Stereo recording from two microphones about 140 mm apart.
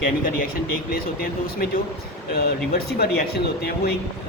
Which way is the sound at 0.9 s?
90° left.